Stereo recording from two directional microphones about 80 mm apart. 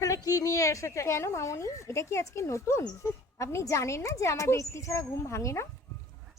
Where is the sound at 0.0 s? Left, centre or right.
Left.